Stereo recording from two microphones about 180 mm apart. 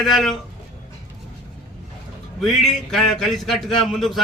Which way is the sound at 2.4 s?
Centre (ahead or behind).